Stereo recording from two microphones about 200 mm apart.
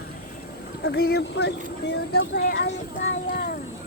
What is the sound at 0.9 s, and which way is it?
Speech, 50° left (ahead or behind).